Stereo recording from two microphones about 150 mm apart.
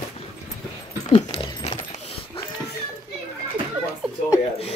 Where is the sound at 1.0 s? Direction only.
40° left (ahead or behind).